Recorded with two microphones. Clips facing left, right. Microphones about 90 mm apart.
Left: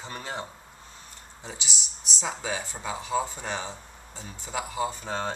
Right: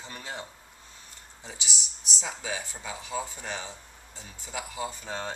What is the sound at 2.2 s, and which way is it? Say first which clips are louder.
Speech: left 4 dB; 35° left (ahead or behind).